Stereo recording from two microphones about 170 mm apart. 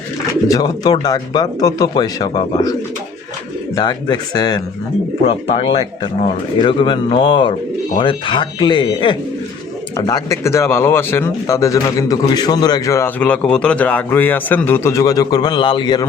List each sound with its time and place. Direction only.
0.4 s speech: 20° left (ahead or behind)
3.8 s speech: 25° left (ahead or behind)